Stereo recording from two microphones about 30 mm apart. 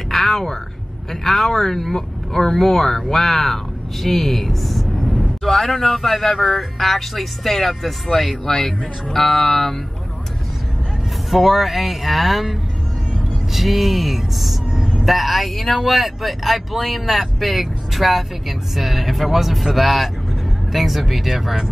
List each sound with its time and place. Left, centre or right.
0.1 s a sound: centre
1.2 s speech: centre
11.2 s speech: centre
13.5 s speech: centre